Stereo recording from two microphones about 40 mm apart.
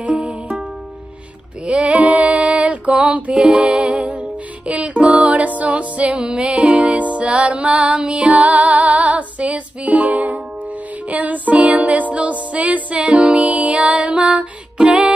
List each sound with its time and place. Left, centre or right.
0.2 s music: right
1.7 s female singing: right
3.4 s music: right